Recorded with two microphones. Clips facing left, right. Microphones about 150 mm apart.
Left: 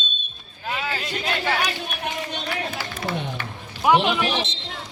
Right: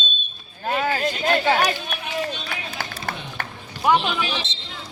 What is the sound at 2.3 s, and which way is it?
Run, 60° left (ahead or behind).